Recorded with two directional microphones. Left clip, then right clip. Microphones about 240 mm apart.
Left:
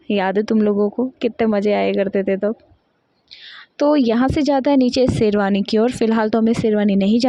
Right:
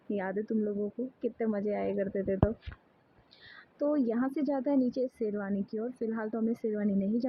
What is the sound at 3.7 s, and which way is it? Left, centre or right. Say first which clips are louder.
Speech: left 14 dB; left.